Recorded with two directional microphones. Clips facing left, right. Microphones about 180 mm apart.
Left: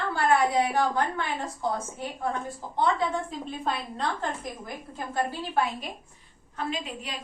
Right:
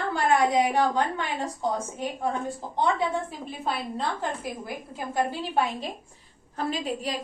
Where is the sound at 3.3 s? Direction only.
5° right (ahead or behind).